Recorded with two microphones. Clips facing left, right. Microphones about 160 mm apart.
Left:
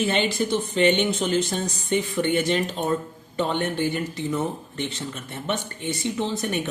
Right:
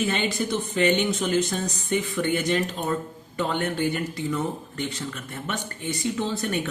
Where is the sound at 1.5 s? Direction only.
30° left (ahead or behind).